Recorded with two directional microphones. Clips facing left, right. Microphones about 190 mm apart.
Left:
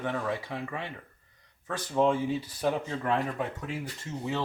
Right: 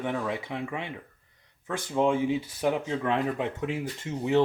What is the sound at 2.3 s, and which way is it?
Speech, 10° right (ahead or behind).